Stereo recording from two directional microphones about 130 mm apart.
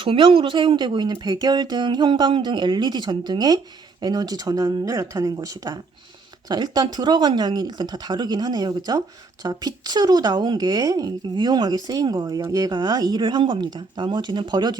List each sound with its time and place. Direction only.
0.0 s speech: 40° right (ahead or behind)